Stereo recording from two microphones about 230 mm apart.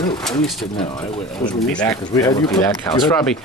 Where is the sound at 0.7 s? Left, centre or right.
Left.